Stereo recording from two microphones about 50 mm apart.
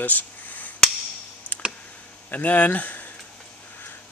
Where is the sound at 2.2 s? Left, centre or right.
Left.